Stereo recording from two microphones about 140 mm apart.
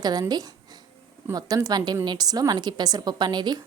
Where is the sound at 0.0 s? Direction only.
30° right (ahead or behind).